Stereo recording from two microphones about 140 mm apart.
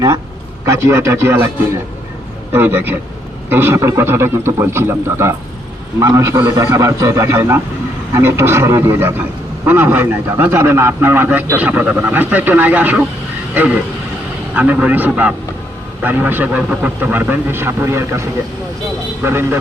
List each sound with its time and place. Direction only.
0.6 s a man's voice: 20° right (ahead or behind)
2.5 s a man's voice: 15° right (ahead or behind)
14.5 s a man's voice: 10° right (ahead or behind)